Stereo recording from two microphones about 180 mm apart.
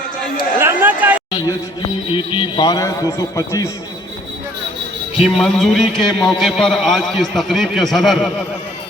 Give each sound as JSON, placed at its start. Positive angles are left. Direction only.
{"t": 0.6, "sound": "a sound", "side_deg": -10}
{"t": 2.0, "sound": "a man's voice", "side_deg": 30}
{"t": 5.1, "sound": "a man's voice", "side_deg": 0}